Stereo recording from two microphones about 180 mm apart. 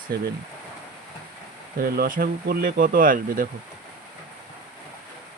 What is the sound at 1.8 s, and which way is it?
Speech, 55° right (ahead or behind).